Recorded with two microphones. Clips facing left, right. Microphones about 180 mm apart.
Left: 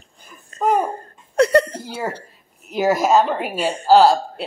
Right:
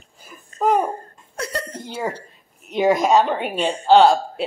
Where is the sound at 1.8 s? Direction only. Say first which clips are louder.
Even; 5° left (ahead or behind).